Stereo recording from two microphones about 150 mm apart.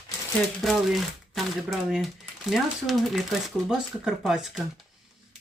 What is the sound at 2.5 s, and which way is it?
Speech, centre (ahead or behind).